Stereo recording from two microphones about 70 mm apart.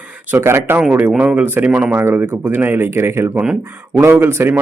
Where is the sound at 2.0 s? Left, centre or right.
Right.